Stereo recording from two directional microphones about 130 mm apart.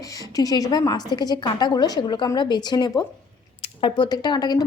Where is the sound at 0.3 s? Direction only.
30° left (ahead or behind).